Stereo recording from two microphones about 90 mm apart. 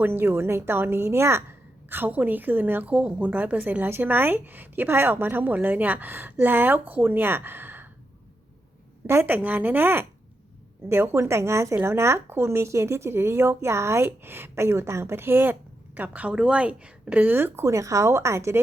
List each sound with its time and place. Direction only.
0.0 s a woman's voice: 25° right (ahead or behind)
9.0 s a woman's voice: 25° right (ahead or behind)